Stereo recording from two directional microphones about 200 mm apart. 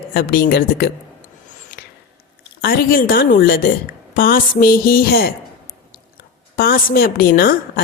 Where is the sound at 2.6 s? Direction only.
50° left (ahead or behind).